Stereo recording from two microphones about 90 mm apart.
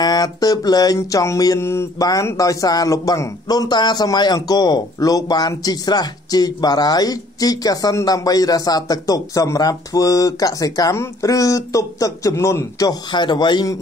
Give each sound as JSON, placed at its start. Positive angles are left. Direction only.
{"t": 0.0, "sound": "music", "side_deg": 50}
{"t": 0.9, "sound": "speech", "side_deg": 35}
{"t": 1.6, "sound": "mantra", "side_deg": 30}
{"t": 2.0, "sound": "a man's voice", "side_deg": 40}
{"t": 13.1, "sound": "a man's voice", "side_deg": 55}